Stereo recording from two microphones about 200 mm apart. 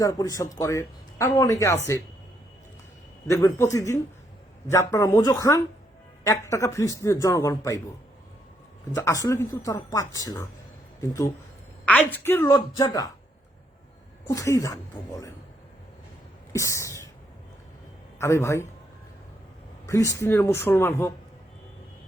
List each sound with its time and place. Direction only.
0.0 s a man's voice: 15° left (ahead or behind)
3.2 s a man's voice: 15° left (ahead or behind)
9.0 s a man's voice: 15° left (ahead or behind)
11.9 s a man's voice: 10° left (ahead or behind)
14.3 s a man's voice: 15° left (ahead or behind)
16.5 s a sound: 15° left (ahead or behind)
18.2 s a man's voice: 15° left (ahead or behind)
19.9 s a man's voice: 15° left (ahead or behind)